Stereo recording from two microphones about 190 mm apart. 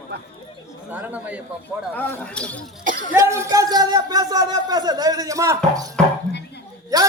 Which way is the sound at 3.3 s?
15° right (ahead or behind).